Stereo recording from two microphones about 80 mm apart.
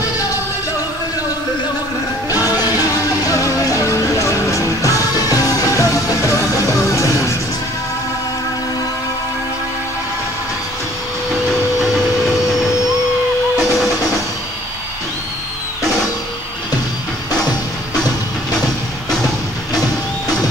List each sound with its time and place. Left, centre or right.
2.3 s music: left